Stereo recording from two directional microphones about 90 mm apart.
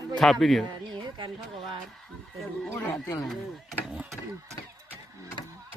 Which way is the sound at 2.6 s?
30° left (ahead or behind).